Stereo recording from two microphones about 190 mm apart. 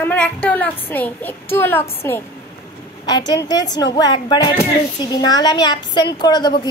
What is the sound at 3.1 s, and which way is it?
A woman's voice, 20° left (ahead or behind).